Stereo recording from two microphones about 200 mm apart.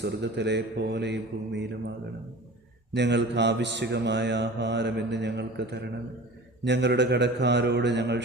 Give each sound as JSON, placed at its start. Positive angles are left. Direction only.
{"t": 0.0, "sound": "mantra", "side_deg": -60}
{"t": 2.9, "sound": "mantra", "side_deg": -60}